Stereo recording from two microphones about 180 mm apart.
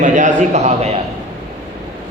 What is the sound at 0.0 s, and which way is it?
Speech, 45° right (ahead or behind).